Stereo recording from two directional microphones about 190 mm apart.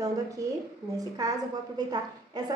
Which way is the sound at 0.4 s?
20° right (ahead or behind).